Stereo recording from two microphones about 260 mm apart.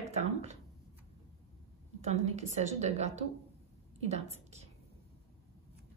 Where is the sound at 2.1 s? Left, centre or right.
Right.